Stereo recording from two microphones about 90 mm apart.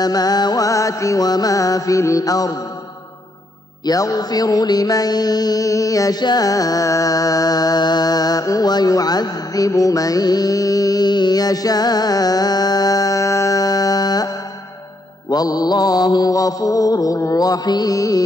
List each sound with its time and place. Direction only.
0.0 s music: 45° left (ahead or behind)
3.8 s music: 45° left (ahead or behind)
15.2 s mantra: 45° left (ahead or behind)